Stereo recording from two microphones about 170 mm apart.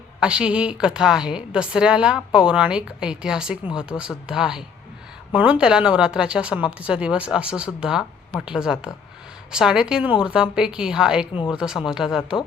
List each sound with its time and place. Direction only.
0.2 s a woman's voice: 5° right (ahead or behind)